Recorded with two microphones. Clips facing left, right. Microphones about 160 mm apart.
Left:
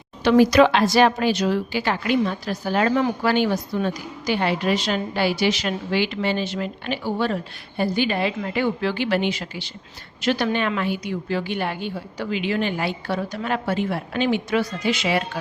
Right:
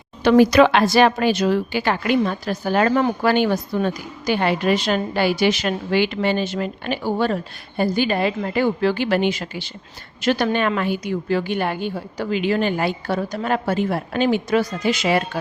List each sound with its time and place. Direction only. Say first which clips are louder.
0.3 s a woman's voice: right 2 dB; 60° right (ahead or behind); by 15.2 s 45° right (ahead or behind)